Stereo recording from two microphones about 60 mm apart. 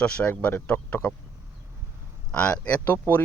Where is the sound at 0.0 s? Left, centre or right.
Centre.